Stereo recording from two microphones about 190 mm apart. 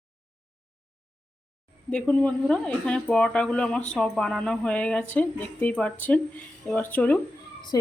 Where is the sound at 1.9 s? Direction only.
5° left (ahead or behind).